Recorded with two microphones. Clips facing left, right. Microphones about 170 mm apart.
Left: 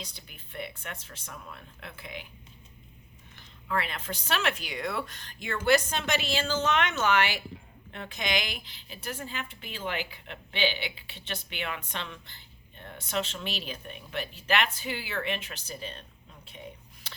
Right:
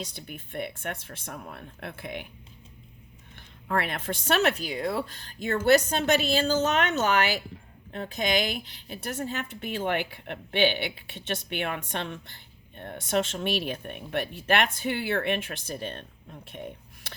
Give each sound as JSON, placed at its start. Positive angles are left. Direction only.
{"t": 0.2, "sound": "a woman's voice", "side_deg": -50}
{"t": 3.3, "sound": "a woman's voice", "side_deg": -50}